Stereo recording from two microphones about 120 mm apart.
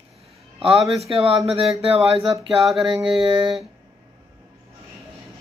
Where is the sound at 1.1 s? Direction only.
55° right (ahead or behind).